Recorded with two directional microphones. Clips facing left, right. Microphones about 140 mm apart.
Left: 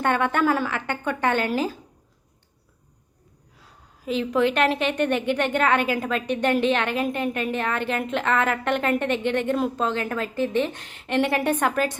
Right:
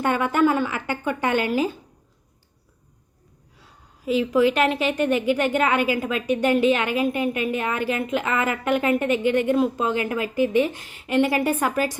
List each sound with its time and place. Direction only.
0.0 s a woman's voice: 5° right (ahead or behind)
4.0 s a woman's voice: 5° right (ahead or behind)